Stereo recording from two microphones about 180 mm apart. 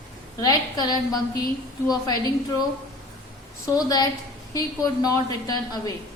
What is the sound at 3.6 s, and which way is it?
A woman's voice, 20° left (ahead or behind).